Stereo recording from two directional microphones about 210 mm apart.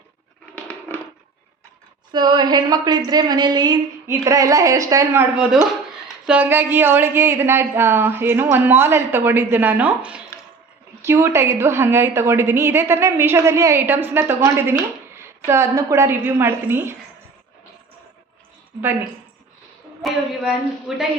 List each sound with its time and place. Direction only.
0.5 s a sound: 10° left (ahead or behind)
2.1 s a woman's voice: 20° right (ahead or behind)
18.8 s a woman's voice: 10° right (ahead or behind)